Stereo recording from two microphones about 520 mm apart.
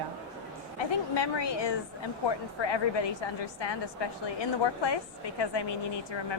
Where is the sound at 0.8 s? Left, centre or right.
Left.